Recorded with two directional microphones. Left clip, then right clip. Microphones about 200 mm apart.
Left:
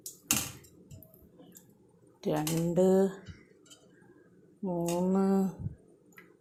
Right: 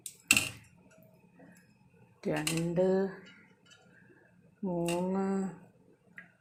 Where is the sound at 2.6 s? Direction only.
20° left (ahead or behind).